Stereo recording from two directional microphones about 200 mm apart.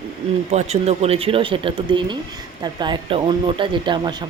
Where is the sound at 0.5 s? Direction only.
35° right (ahead or behind).